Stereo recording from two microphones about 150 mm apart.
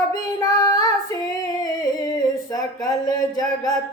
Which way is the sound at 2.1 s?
25° left (ahead or behind).